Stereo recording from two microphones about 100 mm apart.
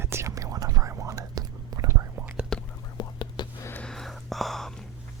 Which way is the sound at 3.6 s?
25° left (ahead or behind).